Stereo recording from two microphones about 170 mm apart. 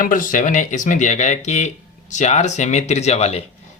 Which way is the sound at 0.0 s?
50° left (ahead or behind).